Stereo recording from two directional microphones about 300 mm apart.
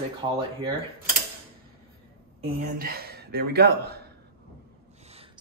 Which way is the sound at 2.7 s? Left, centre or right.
Right.